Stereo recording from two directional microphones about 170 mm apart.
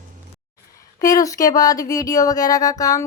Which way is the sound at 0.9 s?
20° left (ahead or behind).